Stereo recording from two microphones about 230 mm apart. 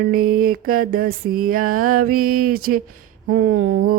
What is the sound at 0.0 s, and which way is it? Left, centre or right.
Mantra, right.